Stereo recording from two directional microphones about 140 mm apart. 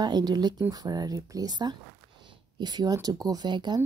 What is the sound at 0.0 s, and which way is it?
Speech, 30° right (ahead or behind).